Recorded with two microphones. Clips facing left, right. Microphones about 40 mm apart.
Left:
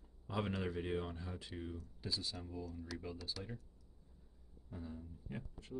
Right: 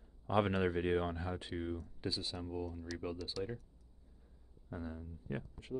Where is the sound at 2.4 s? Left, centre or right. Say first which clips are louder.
Right 5 dB; right.